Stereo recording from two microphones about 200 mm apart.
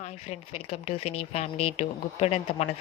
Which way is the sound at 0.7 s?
30° left (ahead or behind).